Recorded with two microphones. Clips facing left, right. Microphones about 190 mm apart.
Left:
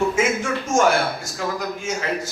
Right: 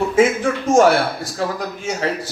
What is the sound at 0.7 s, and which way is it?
A man's voice, 35° right (ahead or behind).